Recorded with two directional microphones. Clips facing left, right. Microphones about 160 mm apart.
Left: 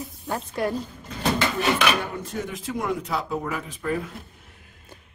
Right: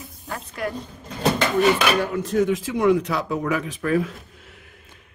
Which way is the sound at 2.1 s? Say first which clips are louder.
Right 11 dB; 90° right.